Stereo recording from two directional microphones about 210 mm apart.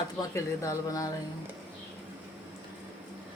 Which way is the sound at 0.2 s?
15° left (ahead or behind).